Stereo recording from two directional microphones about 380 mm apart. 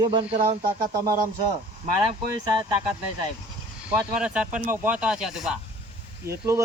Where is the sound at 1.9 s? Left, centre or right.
Right.